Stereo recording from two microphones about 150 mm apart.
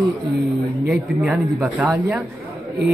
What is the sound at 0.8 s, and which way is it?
Speech, 5° right (ahead or behind).